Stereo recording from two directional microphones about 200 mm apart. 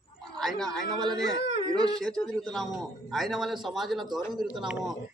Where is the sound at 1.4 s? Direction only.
60° left (ahead or behind).